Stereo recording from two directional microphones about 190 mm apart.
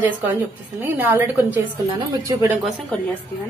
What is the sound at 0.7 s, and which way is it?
A woman's voice, 10° right (ahead or behind).